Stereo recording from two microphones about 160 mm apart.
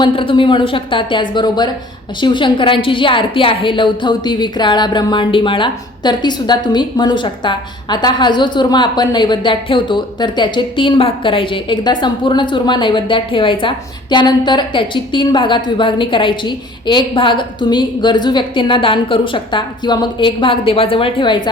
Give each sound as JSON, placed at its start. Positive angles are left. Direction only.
{"t": 0.0, "sound": "a woman's voice", "side_deg": 30}